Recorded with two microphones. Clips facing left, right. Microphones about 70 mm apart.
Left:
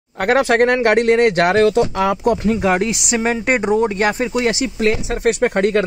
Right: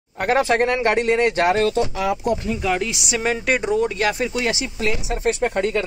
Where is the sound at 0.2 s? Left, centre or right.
Left.